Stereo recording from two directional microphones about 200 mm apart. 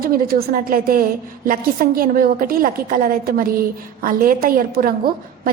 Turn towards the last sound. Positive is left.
turn(degrees=-45)  # may be behind; listen again after turning